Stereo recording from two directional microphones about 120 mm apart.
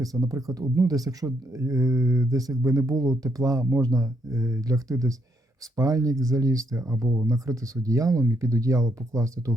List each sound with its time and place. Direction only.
0.0 s speech: 30° right (ahead or behind)